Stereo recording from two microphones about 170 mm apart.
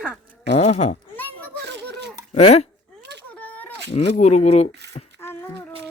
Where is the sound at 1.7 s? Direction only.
85° right.